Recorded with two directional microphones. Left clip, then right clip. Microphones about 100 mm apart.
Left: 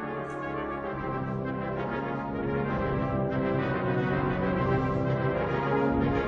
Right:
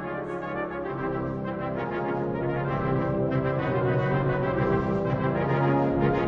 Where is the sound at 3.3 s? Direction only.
25° right (ahead or behind).